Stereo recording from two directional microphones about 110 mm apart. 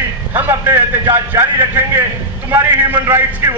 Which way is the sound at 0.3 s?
20° right (ahead or behind).